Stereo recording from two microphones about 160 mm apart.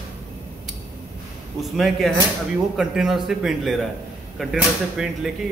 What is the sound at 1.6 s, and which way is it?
Speech, centre (ahead or behind).